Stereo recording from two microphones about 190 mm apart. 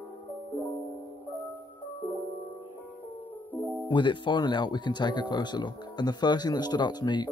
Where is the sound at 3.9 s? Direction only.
25° left (ahead or behind).